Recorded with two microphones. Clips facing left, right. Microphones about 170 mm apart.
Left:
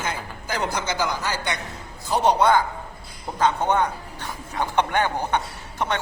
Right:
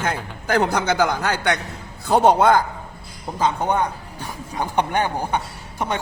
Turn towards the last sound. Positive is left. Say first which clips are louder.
# right 1 dB
turn(degrees=-10)  # may be behind; listen again after turning